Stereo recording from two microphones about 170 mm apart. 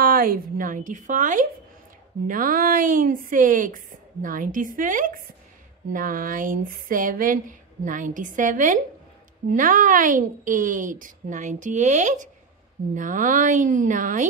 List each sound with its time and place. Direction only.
0.0 s a woman's voice: 55° right (ahead or behind)